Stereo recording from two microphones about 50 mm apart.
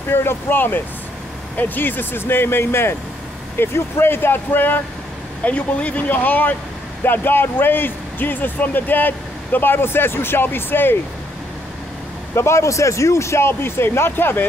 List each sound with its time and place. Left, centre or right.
0.1 s speech: left
5.4 s speech: left
12.4 s speech: left